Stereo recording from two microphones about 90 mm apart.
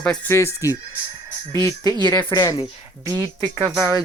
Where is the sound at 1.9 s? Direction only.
55° right (ahead or behind).